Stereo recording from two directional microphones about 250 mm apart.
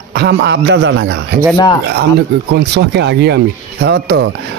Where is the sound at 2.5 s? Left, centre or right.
Right.